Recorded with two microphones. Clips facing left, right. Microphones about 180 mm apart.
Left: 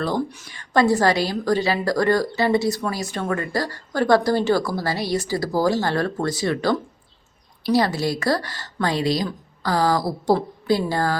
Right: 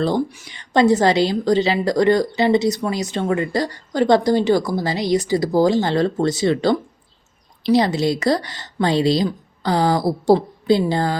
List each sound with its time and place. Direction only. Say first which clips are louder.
0.3 s a woman's voice: even; 15° right (ahead or behind)